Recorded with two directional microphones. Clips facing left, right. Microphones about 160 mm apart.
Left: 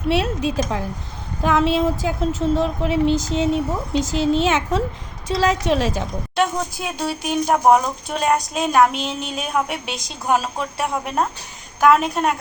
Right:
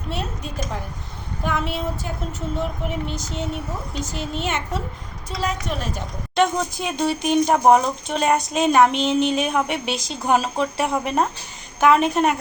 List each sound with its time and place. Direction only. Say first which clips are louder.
0.1 s a woman's voice: left 10 dB; 90° left
6.3 s speech: right 2 dB; 5° left (ahead or behind)